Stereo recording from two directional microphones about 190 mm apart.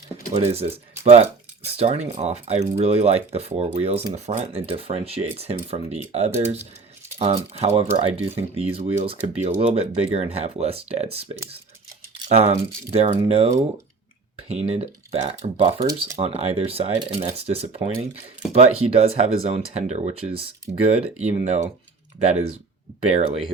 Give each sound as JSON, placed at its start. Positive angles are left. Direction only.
{"t": 0.3, "sound": "speech", "side_deg": -35}
{"t": 12.3, "sound": "speech", "side_deg": -35}
{"t": 16.1, "sound": "speech", "side_deg": -35}
{"t": 23.1, "sound": "speech", "side_deg": -30}